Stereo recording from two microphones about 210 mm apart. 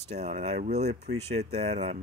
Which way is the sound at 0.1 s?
30° right (ahead or behind).